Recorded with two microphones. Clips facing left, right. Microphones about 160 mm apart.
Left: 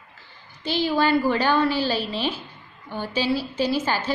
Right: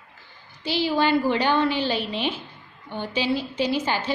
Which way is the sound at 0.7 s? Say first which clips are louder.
Left 1 dB; 15° right (ahead or behind).